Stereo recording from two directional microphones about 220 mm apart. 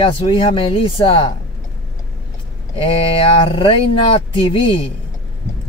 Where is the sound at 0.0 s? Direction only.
25° left (ahead or behind).